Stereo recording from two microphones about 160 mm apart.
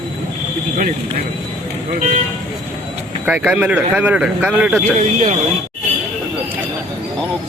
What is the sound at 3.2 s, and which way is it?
Speech, 10° right (ahead or behind).